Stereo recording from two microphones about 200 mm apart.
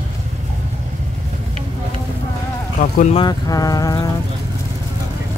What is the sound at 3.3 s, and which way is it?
Speech, 20° left (ahead or behind).